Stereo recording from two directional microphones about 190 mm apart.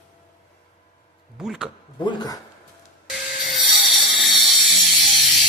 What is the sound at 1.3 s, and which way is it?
Speech, centre (ahead or behind).